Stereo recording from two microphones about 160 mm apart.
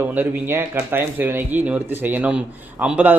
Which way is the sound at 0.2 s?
10° right (ahead or behind).